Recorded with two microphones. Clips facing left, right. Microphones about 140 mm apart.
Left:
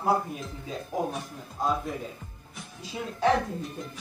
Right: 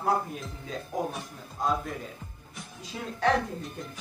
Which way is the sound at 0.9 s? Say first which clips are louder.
Left 1 dB; 5° left (ahead or behind).